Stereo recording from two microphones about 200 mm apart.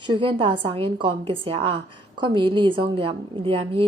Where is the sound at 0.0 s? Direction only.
25° right (ahead or behind).